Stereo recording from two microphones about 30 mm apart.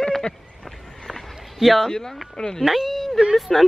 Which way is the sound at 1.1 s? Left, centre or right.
Centre.